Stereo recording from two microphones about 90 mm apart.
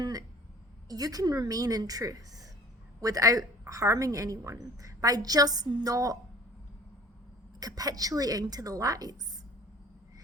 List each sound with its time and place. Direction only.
0.0 s a sound: 45° right (ahead or behind)
0.9 s a woman's voice: 45° right (ahead or behind)
7.6 s a woman's voice: 45° right (ahead or behind)